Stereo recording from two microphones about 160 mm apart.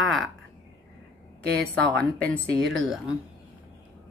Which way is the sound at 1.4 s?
90° right.